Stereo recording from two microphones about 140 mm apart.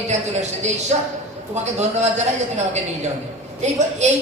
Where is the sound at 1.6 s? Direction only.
55° right (ahead or behind).